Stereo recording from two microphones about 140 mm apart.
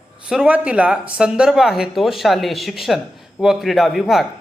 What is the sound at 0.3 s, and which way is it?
Speech, 5° right (ahead or behind).